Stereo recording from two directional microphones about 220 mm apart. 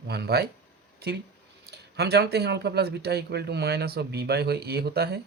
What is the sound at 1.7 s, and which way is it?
Speech, 50° right (ahead or behind).